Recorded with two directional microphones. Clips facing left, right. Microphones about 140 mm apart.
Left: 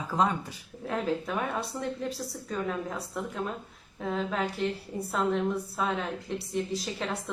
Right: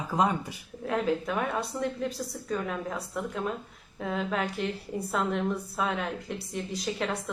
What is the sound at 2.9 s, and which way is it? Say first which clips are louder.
Speech: right 1 dB; centre (ahead or behind).